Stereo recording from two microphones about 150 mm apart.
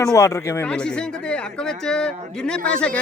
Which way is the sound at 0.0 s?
20° left (ahead or behind).